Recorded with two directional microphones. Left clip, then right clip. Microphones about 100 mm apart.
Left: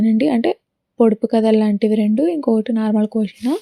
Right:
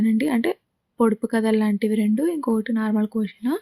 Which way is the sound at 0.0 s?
35° left (ahead or behind).